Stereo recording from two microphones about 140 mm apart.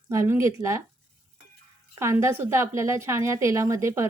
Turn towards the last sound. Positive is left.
turn(degrees=-20)  # may be behind; listen again after turning